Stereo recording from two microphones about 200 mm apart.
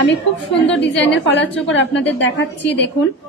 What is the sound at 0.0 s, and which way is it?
A woman's voice, 65° left (ahead or behind).